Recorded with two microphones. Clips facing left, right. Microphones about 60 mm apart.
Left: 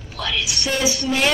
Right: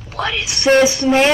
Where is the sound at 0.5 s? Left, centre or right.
Right.